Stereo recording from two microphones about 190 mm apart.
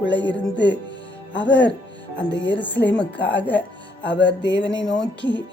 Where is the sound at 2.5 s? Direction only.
10° left (ahead or behind).